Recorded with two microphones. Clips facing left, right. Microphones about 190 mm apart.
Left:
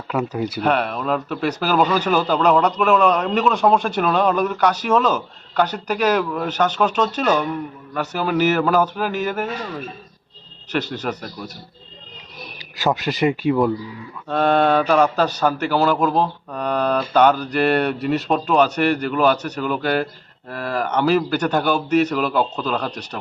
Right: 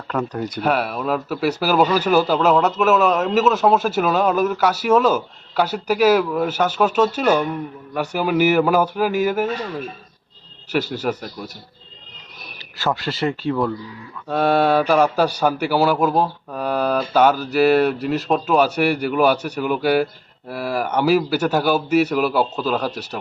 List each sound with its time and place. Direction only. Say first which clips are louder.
0.1 s speech: left 1 dB; 10° left (ahead or behind)
0.7 s a man's voice: right 1 dB; 5° right (ahead or behind)
10.7 s a man's voice: right 2 dB; 10° right (ahead or behind)
12.5 s speech: left 2 dB; 15° left (ahead or behind)
14.3 s a man's voice: even; 5° right (ahead or behind)